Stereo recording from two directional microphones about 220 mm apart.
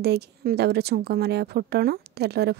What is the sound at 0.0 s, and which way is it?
Speech, 50° right (ahead or behind).